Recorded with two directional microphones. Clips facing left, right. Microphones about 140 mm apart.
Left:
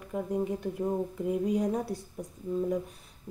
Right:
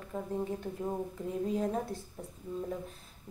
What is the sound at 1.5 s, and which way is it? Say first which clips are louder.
Speech: left 4 dB; 15° left (ahead or behind).